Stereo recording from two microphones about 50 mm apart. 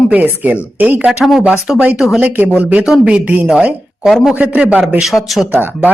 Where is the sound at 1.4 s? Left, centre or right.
Right.